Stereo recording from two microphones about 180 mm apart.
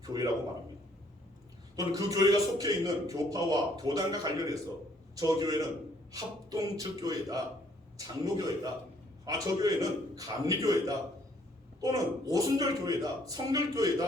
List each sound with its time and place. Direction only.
0.0 s a man's voice: 20° right (ahead or behind)
1.7 s a man's voice: 20° right (ahead or behind)